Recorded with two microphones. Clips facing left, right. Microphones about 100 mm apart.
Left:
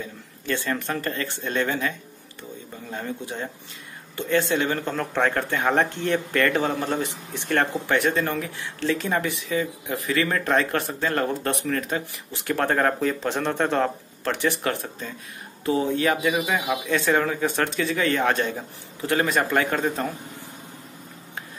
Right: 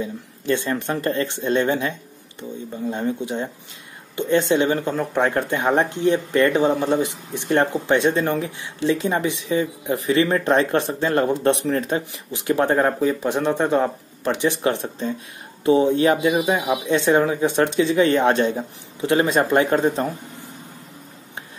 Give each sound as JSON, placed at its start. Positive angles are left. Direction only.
{"t": 0.0, "sound": "speech", "side_deg": -20}